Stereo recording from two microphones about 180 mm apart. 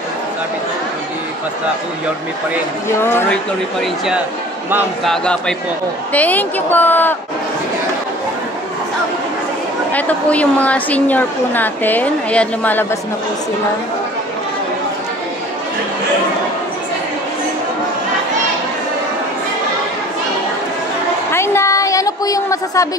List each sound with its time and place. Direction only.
3.0 s a woman's voice: 15° left (ahead or behind)
5.0 s a man's voice: 5° left (ahead or behind)
9.9 s a woman's voice: 10° left (ahead or behind)
21.3 s a sound: 15° left (ahead or behind)